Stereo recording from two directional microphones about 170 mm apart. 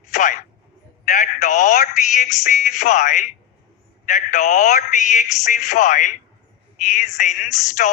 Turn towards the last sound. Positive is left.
turn(degrees=50)  # may be behind; listen again after turning